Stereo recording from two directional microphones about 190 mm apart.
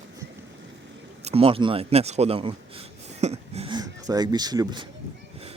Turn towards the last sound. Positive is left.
turn(degrees=-20)  # may be behind; listen again after turning